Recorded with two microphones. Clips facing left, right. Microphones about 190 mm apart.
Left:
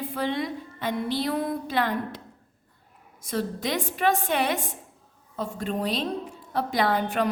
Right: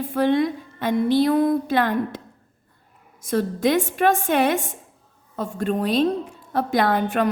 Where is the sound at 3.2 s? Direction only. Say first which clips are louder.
Right 8 dB; 50° right (ahead or behind).